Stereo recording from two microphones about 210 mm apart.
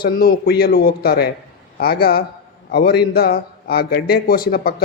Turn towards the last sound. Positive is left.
turn(degrees=45)  # may be behind; listen again after turning